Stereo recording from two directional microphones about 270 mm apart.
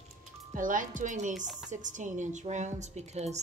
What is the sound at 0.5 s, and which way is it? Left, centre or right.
A woman's voice, right.